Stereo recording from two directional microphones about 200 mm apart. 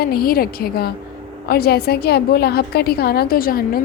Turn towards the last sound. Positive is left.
turn(degrees=45)  # may be behind; listen again after turning